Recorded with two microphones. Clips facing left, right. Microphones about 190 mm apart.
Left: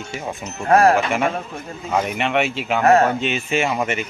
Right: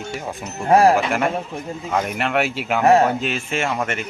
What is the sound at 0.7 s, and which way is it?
Speech, 10° right (ahead or behind).